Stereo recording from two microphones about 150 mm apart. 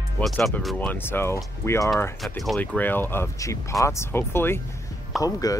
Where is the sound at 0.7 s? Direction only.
10° left (ahead or behind).